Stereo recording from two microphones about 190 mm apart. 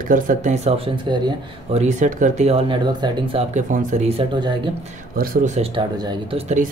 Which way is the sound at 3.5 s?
40° right (ahead or behind).